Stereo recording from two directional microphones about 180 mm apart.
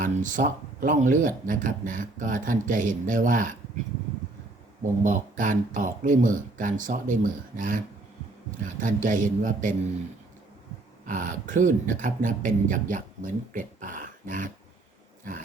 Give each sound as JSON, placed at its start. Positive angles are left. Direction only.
{"t": 0.0, "sound": "speech", "side_deg": -45}
{"t": 4.8, "sound": "speech", "side_deg": -45}
{"t": 11.0, "sound": "speech", "side_deg": -45}